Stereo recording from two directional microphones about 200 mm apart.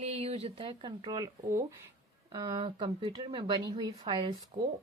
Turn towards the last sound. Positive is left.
turn(degrees=-25)  # may be behind; listen again after turning